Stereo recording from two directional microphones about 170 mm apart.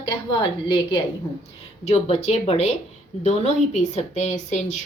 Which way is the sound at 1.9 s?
40° left (ahead or behind).